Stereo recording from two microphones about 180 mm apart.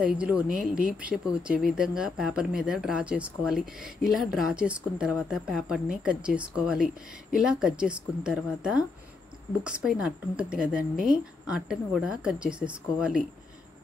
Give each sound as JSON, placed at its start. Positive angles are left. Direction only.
{"t": 0.0, "sound": "speech", "side_deg": -5}
{"t": 9.8, "sound": "speech", "side_deg": -5}